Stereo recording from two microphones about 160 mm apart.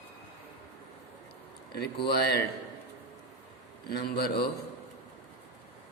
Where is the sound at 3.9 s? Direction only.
85° left.